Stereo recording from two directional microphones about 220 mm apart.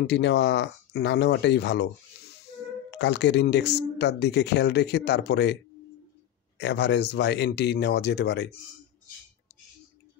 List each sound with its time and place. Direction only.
0.0 s speech: 50° left (ahead or behind)
2.9 s speech: 55° left (ahead or behind)
6.6 s speech: 50° left (ahead or behind)